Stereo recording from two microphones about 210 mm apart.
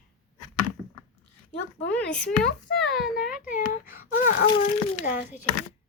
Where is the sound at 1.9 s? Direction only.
5° left (ahead or behind).